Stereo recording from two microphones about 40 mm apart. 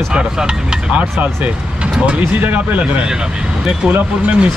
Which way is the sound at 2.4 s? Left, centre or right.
Right.